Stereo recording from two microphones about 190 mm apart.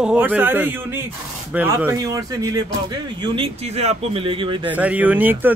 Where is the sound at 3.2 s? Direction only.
30° right (ahead or behind).